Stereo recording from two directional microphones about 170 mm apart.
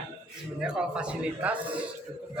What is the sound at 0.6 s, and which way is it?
Speech, 5° right (ahead or behind).